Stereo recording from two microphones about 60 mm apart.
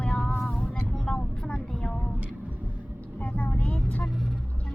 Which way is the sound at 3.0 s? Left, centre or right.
Left.